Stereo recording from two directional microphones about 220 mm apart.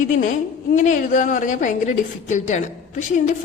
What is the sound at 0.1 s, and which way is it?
A woman's voice, 35° left (ahead or behind).